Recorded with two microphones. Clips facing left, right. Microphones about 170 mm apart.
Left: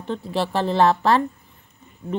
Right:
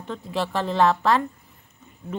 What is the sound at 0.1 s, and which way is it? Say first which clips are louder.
A woman's voice: left 3 dB; 35° left (ahead or behind).